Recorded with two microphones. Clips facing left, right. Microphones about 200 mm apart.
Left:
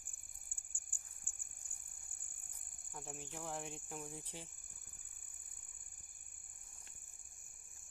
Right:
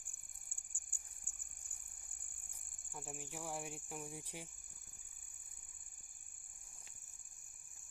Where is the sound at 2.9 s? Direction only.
5° right (ahead or behind).